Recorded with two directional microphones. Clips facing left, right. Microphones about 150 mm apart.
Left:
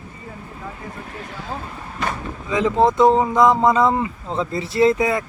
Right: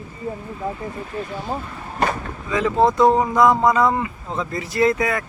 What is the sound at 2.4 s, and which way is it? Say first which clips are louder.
Speech: left 1 dB; 20° left (ahead or behind).